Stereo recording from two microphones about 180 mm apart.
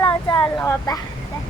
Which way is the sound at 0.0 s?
25° left (ahead or behind).